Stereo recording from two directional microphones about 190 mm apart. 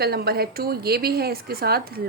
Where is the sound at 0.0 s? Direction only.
55° right (ahead or behind).